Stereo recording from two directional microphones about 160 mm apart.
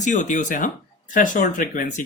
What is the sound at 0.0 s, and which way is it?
Speech, 50° left (ahead or behind).